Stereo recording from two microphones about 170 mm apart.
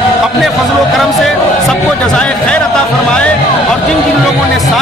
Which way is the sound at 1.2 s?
5° left (ahead or behind).